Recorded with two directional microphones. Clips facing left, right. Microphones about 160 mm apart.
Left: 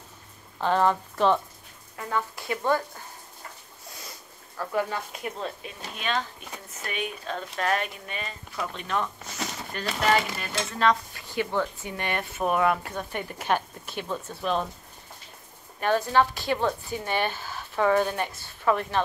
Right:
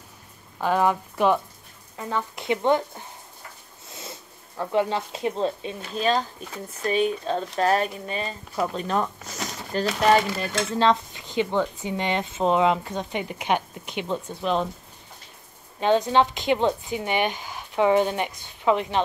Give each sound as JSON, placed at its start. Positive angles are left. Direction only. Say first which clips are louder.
{"t": 0.6, "sound": "speech", "louder": "right 1 dB", "side_deg": -10}
{"t": 15.8, "sound": "speech", "louder": "right 3 dB", "side_deg": -20}